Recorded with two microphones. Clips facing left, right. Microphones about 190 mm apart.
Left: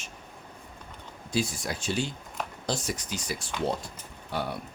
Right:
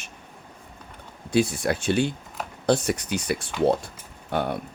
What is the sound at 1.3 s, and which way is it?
Speech, 60° right (ahead or behind).